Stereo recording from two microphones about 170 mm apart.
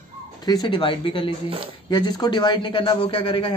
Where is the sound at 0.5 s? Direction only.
30° left (ahead or behind).